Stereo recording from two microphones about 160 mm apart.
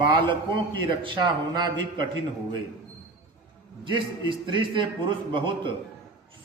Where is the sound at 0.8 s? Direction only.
30° right (ahead or behind).